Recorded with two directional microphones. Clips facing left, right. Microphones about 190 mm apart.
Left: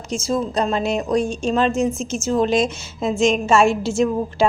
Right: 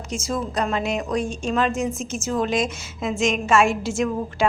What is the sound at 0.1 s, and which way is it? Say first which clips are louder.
A woman's voice: left 5 dB; 30° left (ahead or behind).